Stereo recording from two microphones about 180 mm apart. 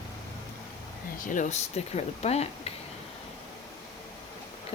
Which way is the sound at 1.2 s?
45° left (ahead or behind).